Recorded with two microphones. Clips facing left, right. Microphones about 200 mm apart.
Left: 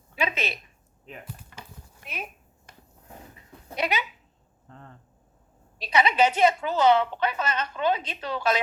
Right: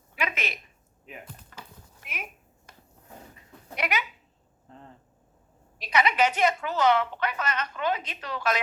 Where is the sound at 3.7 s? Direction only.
30° left (ahead or behind).